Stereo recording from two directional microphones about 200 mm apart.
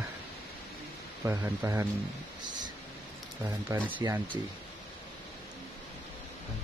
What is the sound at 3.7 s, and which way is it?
Speech, 15° right (ahead or behind).